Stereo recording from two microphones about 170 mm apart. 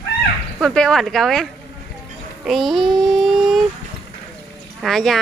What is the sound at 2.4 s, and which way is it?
Child singing, centre (ahead or behind).